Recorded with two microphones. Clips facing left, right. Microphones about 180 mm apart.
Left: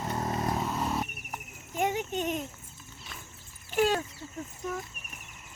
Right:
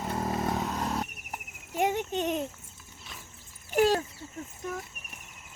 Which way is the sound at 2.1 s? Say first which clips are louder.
Right 2 dB; 35° right (ahead or behind).